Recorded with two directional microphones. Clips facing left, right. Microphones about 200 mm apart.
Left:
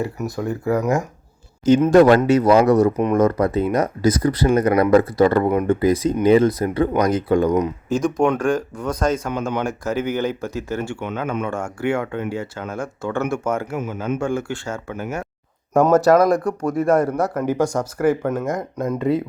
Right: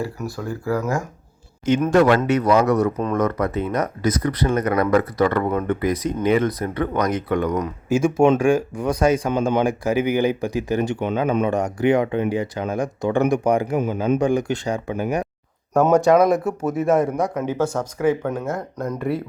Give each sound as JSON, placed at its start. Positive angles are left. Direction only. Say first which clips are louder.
{"t": 0.0, "sound": "speech", "louder": "left 3 dB", "side_deg": 20}
{"t": 1.6, "sound": "speech", "louder": "left 4 dB", "side_deg": 35}
{"t": 7.9, "sound": "speech", "louder": "right 5 dB", "side_deg": -10}
{"t": 13.7, "sound": "speech", "louder": "right 5 dB", "side_deg": -30}
{"t": 14.2, "sound": "speech", "louder": "right 4 dB", "side_deg": -15}
{"t": 16.0, "sound": "speech", "louder": "even", "side_deg": 0}